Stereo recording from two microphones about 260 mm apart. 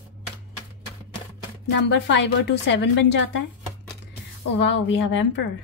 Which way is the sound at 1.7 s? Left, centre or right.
Left.